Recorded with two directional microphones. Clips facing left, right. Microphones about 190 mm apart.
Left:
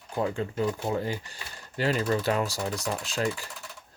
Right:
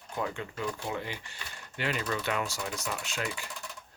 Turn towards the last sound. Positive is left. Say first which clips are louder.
# left 7 dB
turn(degrees=35)  # may be behind; listen again after turning